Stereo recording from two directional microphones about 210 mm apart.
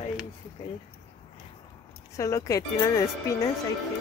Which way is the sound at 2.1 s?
15° left (ahead or behind).